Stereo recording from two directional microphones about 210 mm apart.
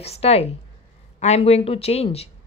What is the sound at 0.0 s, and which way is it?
Speech, 30° left (ahead or behind).